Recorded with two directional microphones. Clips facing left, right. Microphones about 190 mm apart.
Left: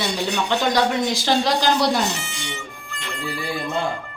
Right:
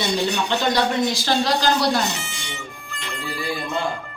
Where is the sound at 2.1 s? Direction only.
Centre (ahead or behind).